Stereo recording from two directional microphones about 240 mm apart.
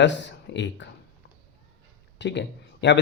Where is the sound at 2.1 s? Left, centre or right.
Left.